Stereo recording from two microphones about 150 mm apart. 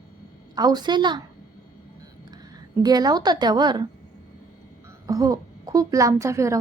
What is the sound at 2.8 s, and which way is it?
A woman's voice, 25° right (ahead or behind).